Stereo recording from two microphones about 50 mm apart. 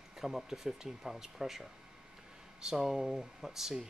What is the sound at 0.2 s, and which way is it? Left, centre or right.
Speech, centre.